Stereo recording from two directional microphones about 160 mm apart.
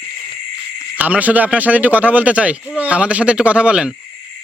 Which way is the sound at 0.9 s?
10° right (ahead or behind).